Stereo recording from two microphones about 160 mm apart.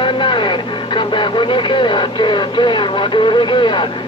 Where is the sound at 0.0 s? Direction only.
30° left (ahead or behind).